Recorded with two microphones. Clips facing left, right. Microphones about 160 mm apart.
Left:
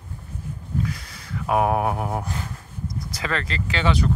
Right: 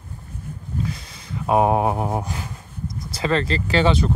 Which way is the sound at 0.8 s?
25° right (ahead or behind).